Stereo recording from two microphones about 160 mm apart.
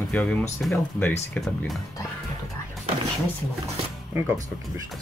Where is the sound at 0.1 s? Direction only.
10° left (ahead or behind).